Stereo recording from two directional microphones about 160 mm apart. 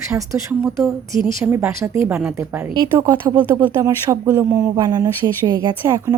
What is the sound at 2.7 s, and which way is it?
A woman's voice, 25° right (ahead or behind).